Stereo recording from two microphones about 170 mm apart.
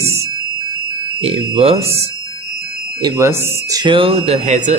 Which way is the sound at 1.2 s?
35° right (ahead or behind).